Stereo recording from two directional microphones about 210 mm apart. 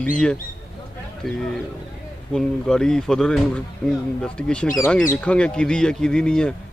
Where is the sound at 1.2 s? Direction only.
Centre (ahead or behind).